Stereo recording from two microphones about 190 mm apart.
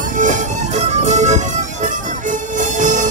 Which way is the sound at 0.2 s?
40° right (ahead or behind).